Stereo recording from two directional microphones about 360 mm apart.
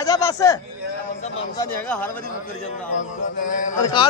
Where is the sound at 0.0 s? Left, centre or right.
Centre.